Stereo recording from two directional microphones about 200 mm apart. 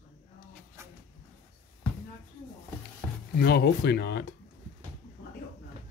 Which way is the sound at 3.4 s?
55° left (ahead or behind).